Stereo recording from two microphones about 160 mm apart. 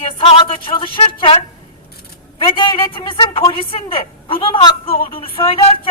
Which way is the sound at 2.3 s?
30° left (ahead or behind).